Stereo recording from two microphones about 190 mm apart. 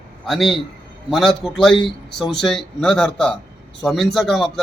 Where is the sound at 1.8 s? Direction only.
25° left (ahead or behind).